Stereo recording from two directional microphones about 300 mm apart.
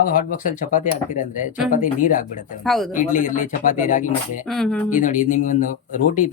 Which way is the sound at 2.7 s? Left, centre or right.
Centre.